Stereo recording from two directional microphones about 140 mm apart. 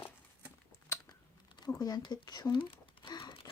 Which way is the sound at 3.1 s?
30° left (ahead or behind).